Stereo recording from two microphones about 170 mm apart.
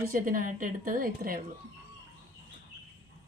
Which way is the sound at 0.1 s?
55° right (ahead or behind).